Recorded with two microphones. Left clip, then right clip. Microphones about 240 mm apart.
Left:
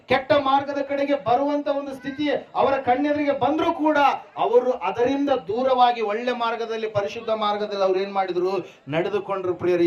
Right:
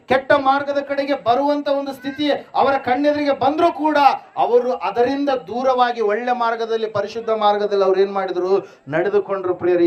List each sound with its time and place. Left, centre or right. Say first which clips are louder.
0.1 s a man's voice: right 4 dB; right; by 9.8 s centre